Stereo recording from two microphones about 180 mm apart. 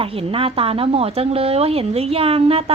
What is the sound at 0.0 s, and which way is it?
Speech, 30° right (ahead or behind).